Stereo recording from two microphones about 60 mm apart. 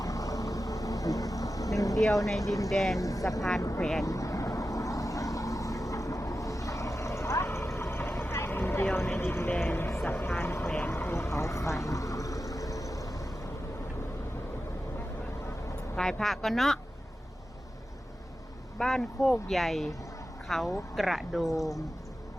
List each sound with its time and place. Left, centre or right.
0.0 s vehicle: left
2.4 s speech: left
2.6 s speech: centre
3.0 s speech: left
3.8 s speech: centre
4.0 s vehicle: left
9.1 s speech: left
10.8 s vehicle: left
16.0 s speech: centre
18.8 s speech: centre